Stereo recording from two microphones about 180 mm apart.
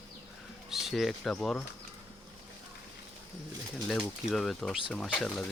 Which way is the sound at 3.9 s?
Centre (ahead or behind).